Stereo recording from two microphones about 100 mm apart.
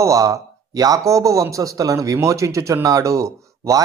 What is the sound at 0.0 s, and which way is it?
Speech, 35° right (ahead or behind).